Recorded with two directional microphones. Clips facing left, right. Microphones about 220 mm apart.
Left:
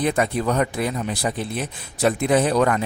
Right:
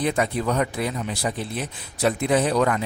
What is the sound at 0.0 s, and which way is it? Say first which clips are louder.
Speech: left 2 dB; 50° left (ahead or behind).